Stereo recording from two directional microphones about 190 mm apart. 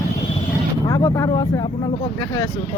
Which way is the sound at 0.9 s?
20° left (ahead or behind).